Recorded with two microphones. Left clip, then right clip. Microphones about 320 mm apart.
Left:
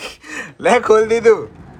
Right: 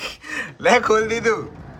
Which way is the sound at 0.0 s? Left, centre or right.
Centre.